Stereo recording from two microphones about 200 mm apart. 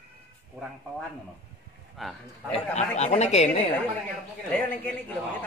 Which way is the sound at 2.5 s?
35° left (ahead or behind).